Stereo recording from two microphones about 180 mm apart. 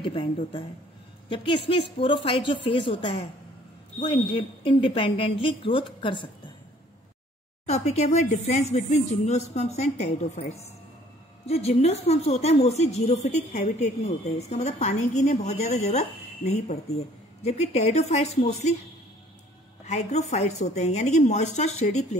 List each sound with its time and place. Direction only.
0.0 s a woman's voice: 30° left (ahead or behind)
7.6 s speech: 40° left (ahead or behind)
11.4 s speech: 35° left (ahead or behind)
19.8 s speech: 40° left (ahead or behind)